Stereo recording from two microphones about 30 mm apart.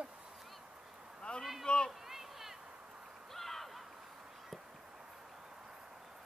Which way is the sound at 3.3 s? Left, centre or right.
Centre.